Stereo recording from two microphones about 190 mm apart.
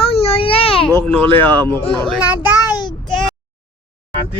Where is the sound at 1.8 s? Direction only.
25° left (ahead or behind).